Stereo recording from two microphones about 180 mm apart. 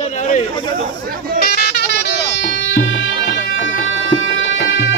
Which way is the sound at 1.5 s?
60° left (ahead or behind).